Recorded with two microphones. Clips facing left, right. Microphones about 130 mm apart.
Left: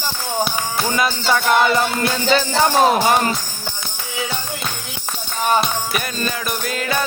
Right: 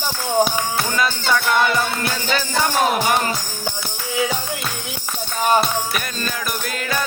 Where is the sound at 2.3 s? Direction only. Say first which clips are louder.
Left 4 dB; 30° left (ahead or behind).